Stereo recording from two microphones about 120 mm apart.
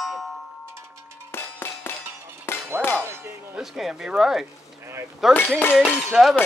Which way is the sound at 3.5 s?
5° right (ahead or behind).